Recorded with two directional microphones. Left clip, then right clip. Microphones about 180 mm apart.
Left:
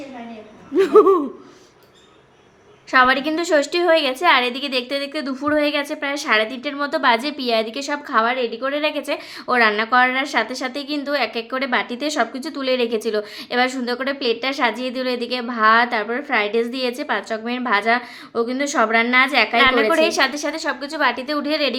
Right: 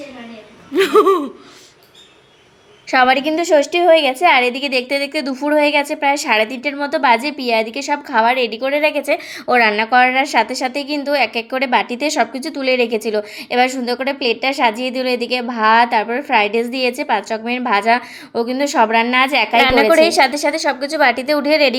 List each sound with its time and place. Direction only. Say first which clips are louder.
0.7 s a sound: right 1 dB; 10° left (ahead or behind)
2.9 s a woman's voice: right 2 dB; 15° right (ahead or behind)
3.2 s a woman's voice: right 5 dB; 5° right (ahead or behind)
14.0 s a woman's voice: right 3 dB; 40° left (ahead or behind)
14.4 s a woman's voice: right 5 dB; 10° right (ahead or behind)